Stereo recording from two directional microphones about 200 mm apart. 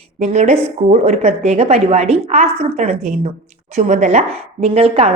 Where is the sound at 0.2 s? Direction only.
30° right (ahead or behind).